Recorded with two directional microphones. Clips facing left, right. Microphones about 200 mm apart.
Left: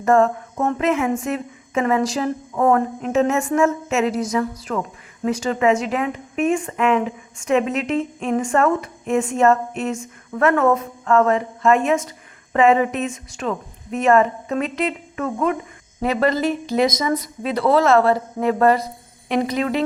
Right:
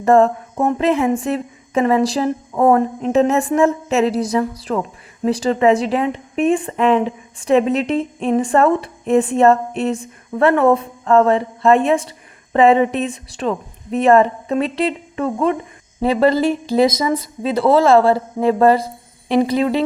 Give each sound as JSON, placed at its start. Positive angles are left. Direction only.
{"t": 0.0, "sound": "a woman's voice", "side_deg": -35}
{"t": 0.5, "sound": "speech", "side_deg": -15}
{"t": 0.8, "sound": "a woman's voice", "side_deg": -30}